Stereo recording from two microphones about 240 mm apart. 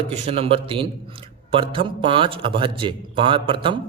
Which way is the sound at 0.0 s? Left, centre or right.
Right.